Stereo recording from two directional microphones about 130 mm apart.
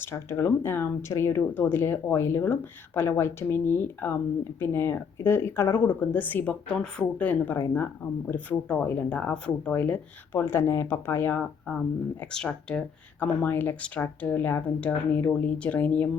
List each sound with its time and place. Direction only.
0.0 s speech: 20° left (ahead or behind)